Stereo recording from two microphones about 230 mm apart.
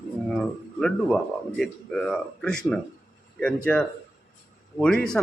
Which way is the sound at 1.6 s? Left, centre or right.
Centre.